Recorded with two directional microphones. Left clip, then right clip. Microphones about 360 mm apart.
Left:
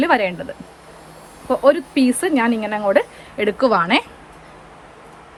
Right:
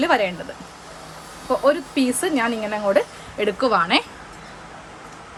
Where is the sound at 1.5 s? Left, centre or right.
Centre.